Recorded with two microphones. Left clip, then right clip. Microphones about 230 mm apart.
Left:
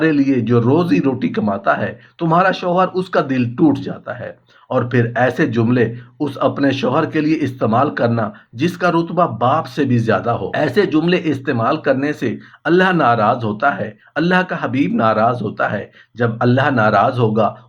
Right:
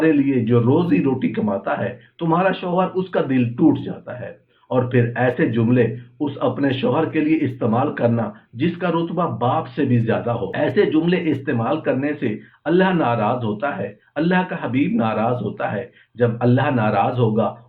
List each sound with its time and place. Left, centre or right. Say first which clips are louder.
0.0 s speech: left 2 dB; left